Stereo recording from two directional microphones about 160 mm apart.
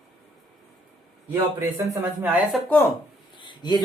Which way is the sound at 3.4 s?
30° left (ahead or behind).